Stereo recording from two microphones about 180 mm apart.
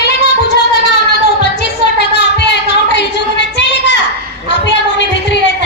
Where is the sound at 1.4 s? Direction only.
70° left (ahead or behind).